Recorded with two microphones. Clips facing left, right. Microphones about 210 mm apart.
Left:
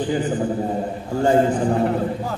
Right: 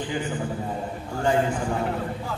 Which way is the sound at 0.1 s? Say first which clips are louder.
Left 7 dB; 35° left (ahead or behind).